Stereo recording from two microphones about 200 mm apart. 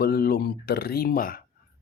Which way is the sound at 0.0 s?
50° left (ahead or behind).